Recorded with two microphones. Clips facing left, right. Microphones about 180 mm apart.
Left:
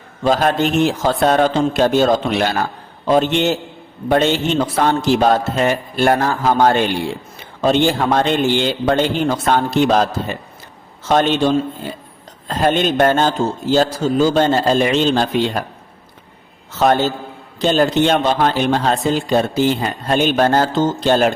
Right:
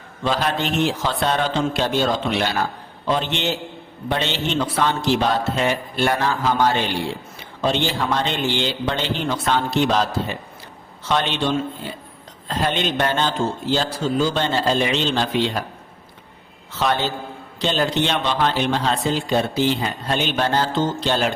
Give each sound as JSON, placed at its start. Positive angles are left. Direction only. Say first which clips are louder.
{"t": 0.3, "sound": "speech", "louder": "left 6 dB", "side_deg": 50}
{"t": 16.7, "sound": "speech", "louder": "left 7 dB", "side_deg": 45}